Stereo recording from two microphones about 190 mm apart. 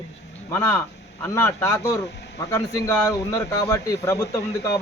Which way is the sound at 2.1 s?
60° left (ahead or behind).